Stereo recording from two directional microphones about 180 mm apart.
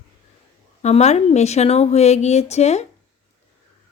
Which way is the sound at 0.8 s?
40° left (ahead or behind).